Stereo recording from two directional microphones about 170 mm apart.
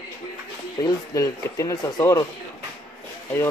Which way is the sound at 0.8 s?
20° left (ahead or behind).